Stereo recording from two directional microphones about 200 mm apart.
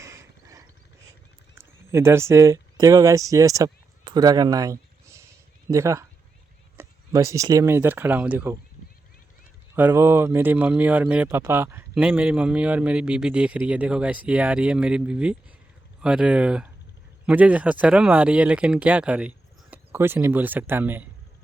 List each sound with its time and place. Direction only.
0.0 s mechanisms: 15° right (ahead or behind)
1.5 s speech: 15° right (ahead or behind)
9.7 s speech: 10° right (ahead or behind)